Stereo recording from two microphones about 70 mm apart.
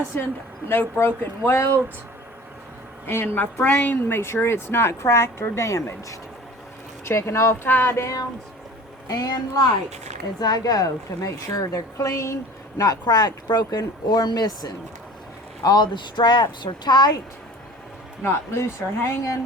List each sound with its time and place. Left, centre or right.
0.7 s speech: left
3.1 s speech: left
4.2 s speech: left
7.6 s speech: left
8.0 s music: left
9.0 s a woman's voice: left
15.6 s speech: left
18.2 s speech: left